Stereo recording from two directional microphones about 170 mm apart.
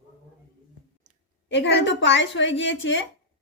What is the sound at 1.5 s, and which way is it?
A woman's voice, 90° left.